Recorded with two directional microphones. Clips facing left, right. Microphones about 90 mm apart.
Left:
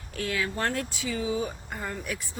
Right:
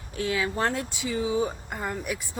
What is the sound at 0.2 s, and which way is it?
Speech, 20° right (ahead or behind).